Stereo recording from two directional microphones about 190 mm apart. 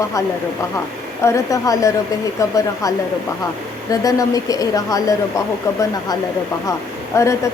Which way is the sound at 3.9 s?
20° left (ahead or behind).